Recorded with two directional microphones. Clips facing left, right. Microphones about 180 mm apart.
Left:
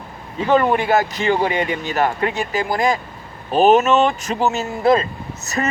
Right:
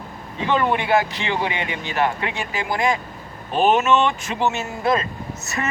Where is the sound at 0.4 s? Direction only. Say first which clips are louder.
Left 4 dB; 40° left (ahead or behind).